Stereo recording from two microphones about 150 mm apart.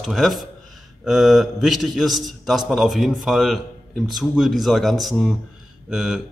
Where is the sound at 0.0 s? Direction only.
Centre (ahead or behind).